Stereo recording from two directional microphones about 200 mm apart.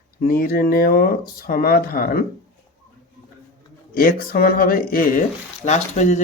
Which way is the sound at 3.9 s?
50° left (ahead or behind).